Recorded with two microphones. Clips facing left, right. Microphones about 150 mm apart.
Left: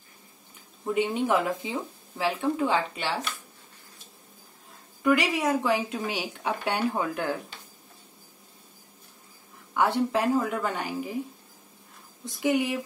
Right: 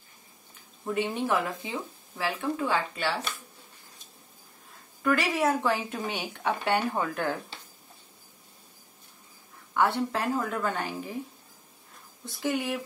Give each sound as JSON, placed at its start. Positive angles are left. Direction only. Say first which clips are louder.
{"t": 0.9, "sound": "a woman's voice", "louder": "left 3 dB", "side_deg": 15}
{"t": 5.0, "sound": "a woman's voice", "louder": "left 1 dB", "side_deg": 15}
{"t": 9.8, "sound": "a woman's voice", "louder": "left 2 dB", "side_deg": 15}
{"t": 12.3, "sound": "a woman's voice", "louder": "left 4 dB", "side_deg": 15}